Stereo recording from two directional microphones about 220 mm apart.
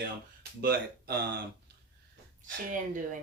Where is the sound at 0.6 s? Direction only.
40° right (ahead or behind).